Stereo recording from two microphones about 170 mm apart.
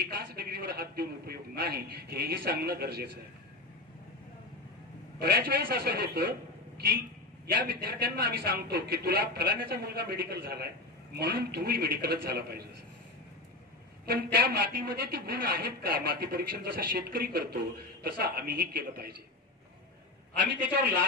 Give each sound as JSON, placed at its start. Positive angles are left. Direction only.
{"t": 0.1, "sound": "a woman's voice", "side_deg": -65}
{"t": 5.2, "sound": "a woman's voice", "side_deg": -65}
{"t": 7.6, "sound": "a woman's voice", "side_deg": -60}
{"t": 14.0, "sound": "a woman's voice", "side_deg": -65}